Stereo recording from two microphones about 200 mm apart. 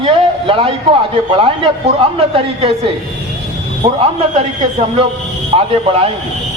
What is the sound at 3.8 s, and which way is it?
A man's voice, 30° right (ahead or behind).